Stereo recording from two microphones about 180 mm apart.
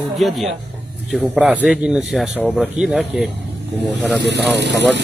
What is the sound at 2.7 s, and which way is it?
Speech, 5° right (ahead or behind).